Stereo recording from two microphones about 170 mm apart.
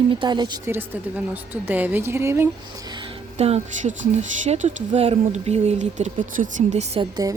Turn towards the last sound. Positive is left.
turn(degrees=-20)  # may be behind; listen again after turning